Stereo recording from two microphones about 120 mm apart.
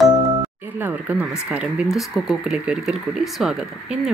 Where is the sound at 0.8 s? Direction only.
15° right (ahead or behind).